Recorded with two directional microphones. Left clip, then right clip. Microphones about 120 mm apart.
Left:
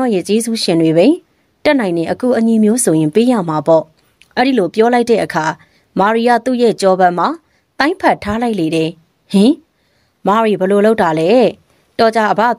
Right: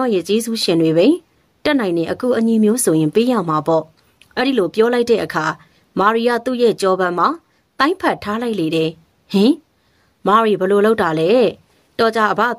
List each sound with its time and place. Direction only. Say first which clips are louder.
0.0 s a woman's voice: left 2 dB; 30° left (ahead or behind)